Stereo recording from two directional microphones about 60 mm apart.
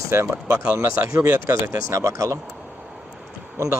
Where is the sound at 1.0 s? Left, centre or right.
Right.